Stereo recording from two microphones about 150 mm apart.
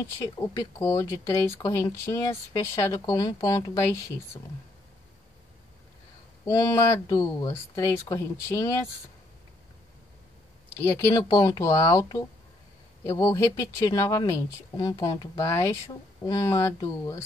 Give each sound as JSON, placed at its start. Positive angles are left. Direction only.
{"t": 0.2, "sound": "speech", "side_deg": 20}
{"t": 6.4, "sound": "speech", "side_deg": 25}
{"t": 11.0, "sound": "speech", "side_deg": 25}